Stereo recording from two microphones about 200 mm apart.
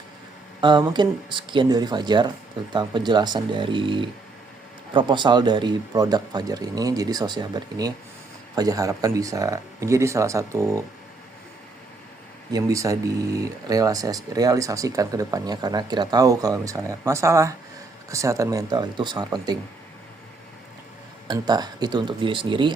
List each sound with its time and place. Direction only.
0.6 s speech: 20° right (ahead or behind)
12.5 s speech: 15° right (ahead or behind)
21.2 s speech: 20° right (ahead or behind)